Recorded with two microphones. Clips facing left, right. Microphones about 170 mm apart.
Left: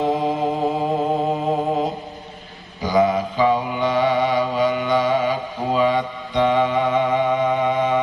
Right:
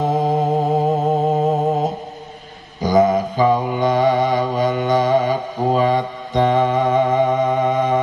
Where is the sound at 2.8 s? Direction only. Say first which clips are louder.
Right 3 dB; 45° right (ahead or behind).